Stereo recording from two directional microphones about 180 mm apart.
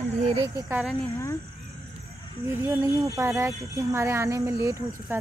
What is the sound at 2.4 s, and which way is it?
Speech, 15° right (ahead or behind).